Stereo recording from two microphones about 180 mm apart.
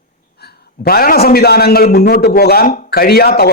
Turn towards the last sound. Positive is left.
turn(degrees=60)  # may be behind; listen again after turning